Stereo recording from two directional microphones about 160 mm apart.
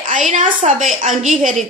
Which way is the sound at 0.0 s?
50° right (ahead or behind).